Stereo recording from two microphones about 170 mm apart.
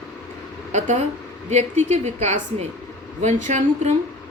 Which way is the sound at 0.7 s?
45° right (ahead or behind).